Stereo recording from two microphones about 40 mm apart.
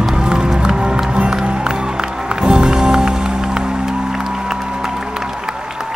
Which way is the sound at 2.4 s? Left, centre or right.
Right.